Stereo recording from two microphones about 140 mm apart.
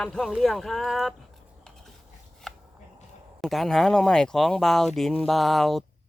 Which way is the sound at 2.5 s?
Centre (ahead or behind).